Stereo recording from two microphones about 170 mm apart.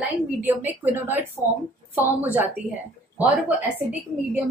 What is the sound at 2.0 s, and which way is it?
A woman's voice, 10° right (ahead or behind).